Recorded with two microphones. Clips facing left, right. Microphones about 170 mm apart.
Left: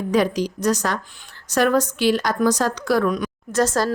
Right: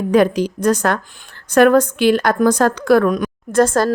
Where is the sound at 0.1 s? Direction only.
55° right (ahead or behind).